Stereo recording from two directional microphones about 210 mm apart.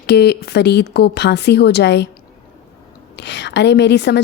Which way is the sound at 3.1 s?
55° left (ahead or behind).